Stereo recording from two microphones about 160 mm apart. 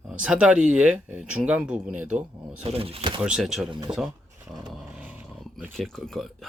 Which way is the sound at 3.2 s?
5° right (ahead or behind).